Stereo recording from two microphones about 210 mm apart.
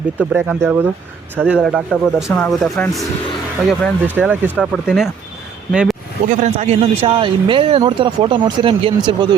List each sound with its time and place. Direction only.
0.2 s speech: 10° right (ahead or behind)
6.2 s a man's voice: 35° right (ahead or behind)